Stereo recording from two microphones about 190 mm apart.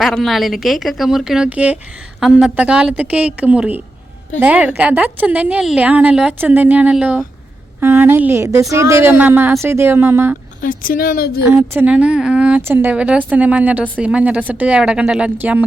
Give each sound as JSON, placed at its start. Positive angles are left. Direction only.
{"t": 0.0, "sound": "a woman's voice", "side_deg": 0}
{"t": 10.6, "sound": "speech", "side_deg": 45}
{"t": 11.4, "sound": "a woman's voice", "side_deg": -10}